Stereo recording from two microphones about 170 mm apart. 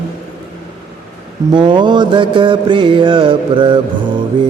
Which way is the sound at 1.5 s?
25° right (ahead or behind).